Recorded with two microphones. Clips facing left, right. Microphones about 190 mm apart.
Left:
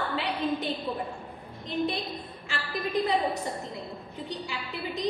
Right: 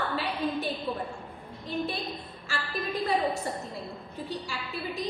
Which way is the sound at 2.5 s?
20° left (ahead or behind).